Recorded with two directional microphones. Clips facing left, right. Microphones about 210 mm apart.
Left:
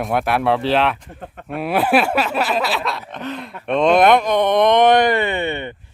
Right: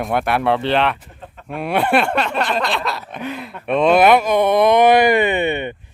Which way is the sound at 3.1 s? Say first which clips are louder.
Right 1 dB; 10° right (ahead or behind).